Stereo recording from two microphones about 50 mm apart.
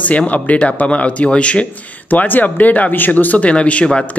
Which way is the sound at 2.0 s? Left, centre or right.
Left.